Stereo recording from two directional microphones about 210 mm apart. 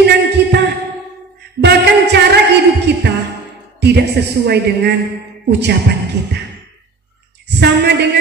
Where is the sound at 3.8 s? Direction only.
50° right (ahead or behind).